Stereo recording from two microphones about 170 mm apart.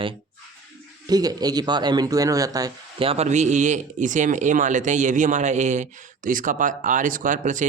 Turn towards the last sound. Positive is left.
turn(degrees=-50)  # may be behind; listen again after turning